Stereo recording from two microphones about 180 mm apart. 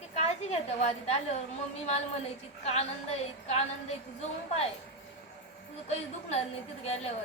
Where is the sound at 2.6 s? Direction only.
35° left (ahead or behind).